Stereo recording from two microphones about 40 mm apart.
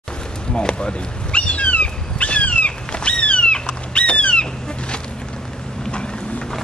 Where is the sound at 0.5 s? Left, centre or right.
Left.